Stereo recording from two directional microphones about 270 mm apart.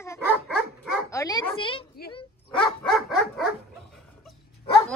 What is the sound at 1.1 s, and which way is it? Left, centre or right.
Bow-wow, centre.